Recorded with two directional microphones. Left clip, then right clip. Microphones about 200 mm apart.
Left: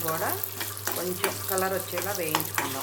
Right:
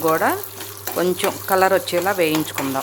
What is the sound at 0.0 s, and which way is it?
Speech, 60° right (ahead or behind).